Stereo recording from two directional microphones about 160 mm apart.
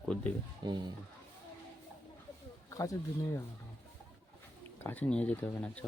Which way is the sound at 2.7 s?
20° left (ahead or behind).